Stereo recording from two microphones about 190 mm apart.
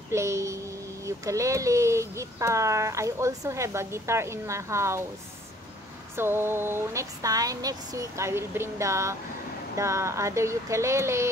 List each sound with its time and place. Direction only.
0.1 s a child's voice: 15° right (ahead or behind)
6.1 s a child's voice: 10° right (ahead or behind)